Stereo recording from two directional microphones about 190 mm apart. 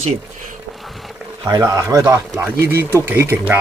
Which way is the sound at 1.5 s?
15° right (ahead or behind).